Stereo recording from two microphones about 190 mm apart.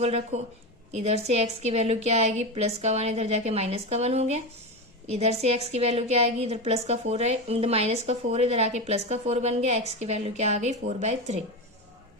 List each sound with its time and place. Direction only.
0.0 s a woman's voice: 35° right (ahead or behind)